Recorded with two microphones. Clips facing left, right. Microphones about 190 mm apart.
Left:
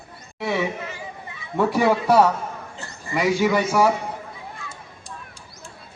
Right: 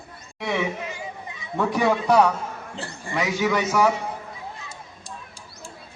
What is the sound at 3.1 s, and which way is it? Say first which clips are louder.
Speech: left 3 dB; 10° left (ahead or behind).